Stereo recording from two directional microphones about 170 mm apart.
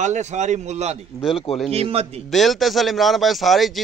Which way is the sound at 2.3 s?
Centre (ahead or behind).